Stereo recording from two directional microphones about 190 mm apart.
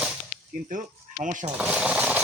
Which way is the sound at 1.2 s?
40° right (ahead or behind).